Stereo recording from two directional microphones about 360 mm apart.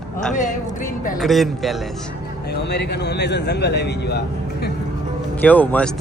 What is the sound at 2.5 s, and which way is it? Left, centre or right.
Speech, left.